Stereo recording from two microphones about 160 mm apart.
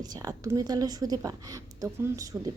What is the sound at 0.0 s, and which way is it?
A woman's voice, 25° right (ahead or behind).